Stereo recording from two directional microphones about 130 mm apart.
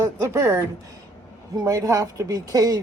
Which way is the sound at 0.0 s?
20° right (ahead or behind).